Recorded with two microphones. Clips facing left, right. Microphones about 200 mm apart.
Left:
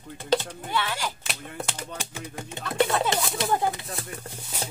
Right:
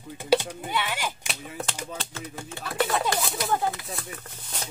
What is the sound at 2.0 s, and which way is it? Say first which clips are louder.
Speech: even; 10° left (ahead or behind).